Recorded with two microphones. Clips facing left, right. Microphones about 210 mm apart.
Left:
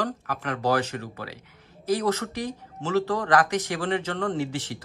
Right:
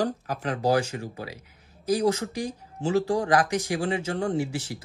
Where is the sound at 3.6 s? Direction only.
25° right (ahead or behind).